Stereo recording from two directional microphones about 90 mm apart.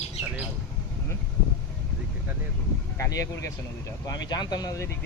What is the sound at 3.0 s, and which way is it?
Speech, 35° left (ahead or behind).